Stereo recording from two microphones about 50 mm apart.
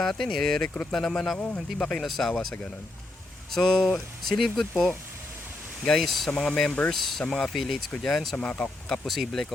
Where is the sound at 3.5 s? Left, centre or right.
Centre.